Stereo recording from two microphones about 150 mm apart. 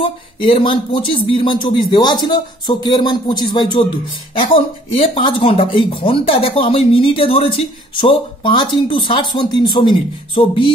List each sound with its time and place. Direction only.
0.0 s speech: 35° left (ahead or behind)
5.1 s speech: 35° left (ahead or behind)